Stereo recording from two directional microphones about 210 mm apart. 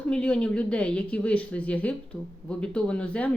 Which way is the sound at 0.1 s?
5° left (ahead or behind).